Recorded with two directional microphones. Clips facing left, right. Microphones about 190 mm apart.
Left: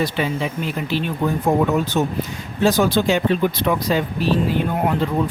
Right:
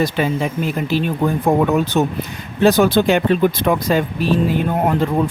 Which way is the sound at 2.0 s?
70° right (ahead or behind).